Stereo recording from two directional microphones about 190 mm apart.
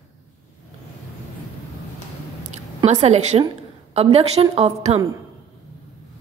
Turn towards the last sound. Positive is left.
turn(degrees=-35)  # may be behind; listen again after turning